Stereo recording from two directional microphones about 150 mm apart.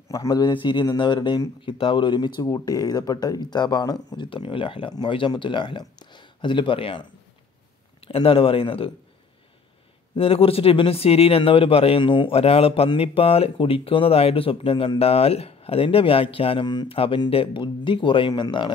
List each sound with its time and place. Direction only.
0.1 s speech: 20° left (ahead or behind)
10.1 s speech: 40° left (ahead or behind)